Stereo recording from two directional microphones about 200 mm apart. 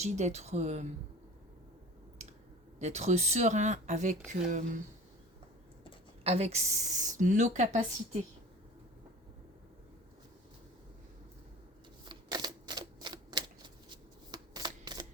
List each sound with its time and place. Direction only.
0.0 s speech: 35° right (ahead or behind)
2.2 s clicking: 35° right (ahead or behind)
2.7 s speech: 35° right (ahead or behind)
6.2 s speech: 30° right (ahead or behind)
12.0 s typewriter: 20° right (ahead or behind)
13.9 s shuffling cards: 20° right (ahead or behind)